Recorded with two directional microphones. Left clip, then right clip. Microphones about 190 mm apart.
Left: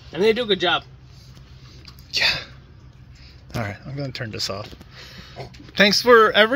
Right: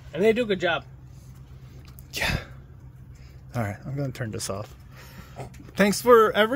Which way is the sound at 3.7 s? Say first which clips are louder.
Left 2 dB; 20° right (ahead or behind).